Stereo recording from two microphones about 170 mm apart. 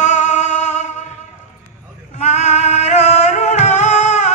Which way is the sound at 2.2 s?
40° left (ahead or behind).